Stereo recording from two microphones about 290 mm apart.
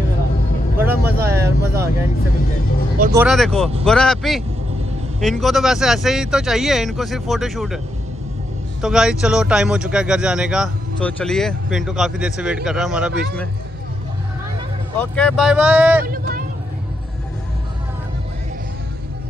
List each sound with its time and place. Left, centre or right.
0.7 s vehicle: centre
3.1 s speech: centre
8.8 s speech: centre
15.0 s speech: centre
16.1 s vehicle: right